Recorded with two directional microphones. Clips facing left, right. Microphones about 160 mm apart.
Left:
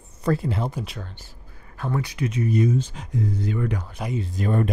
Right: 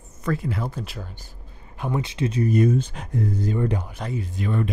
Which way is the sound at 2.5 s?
55° right (ahead or behind).